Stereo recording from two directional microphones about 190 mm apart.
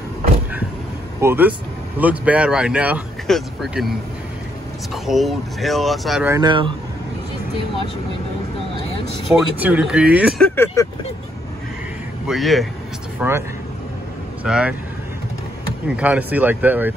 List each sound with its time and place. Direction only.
1.2 s speech: 10° right (ahead or behind)
4.9 s speech: centre (ahead or behind)
6.2 s speech: 20° right (ahead or behind)
9.3 s speech: 10° right (ahead or behind)
10.4 s speech: 10° left (ahead or behind)
12.3 s speech: centre (ahead or behind)
14.4 s speech: 5° right (ahead or behind)
16.0 s speech: 10° right (ahead or behind)